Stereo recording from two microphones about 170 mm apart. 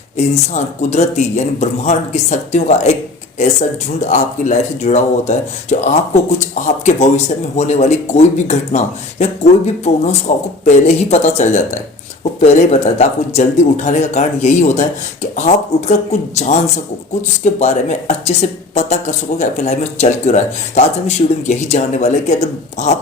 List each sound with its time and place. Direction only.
0.5 s speech: 40° left (ahead or behind)